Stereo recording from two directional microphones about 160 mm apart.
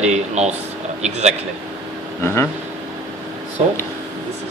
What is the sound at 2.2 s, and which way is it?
Speech, 15° left (ahead or behind).